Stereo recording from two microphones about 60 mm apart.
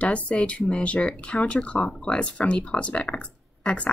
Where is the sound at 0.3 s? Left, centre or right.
Left.